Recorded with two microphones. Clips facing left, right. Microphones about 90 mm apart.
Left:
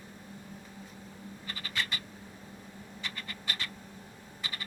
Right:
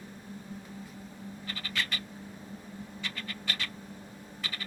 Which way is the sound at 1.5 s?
15° left (ahead or behind).